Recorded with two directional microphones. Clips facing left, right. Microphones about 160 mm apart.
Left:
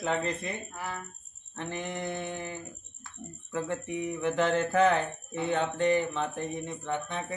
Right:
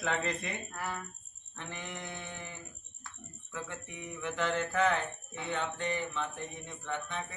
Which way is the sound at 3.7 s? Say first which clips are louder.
Left 11 dB; 45° left (ahead or behind).